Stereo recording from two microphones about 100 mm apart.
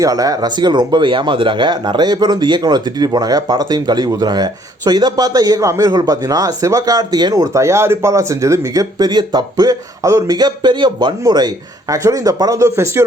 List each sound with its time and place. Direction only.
0.0 s speech: 35° right (ahead or behind)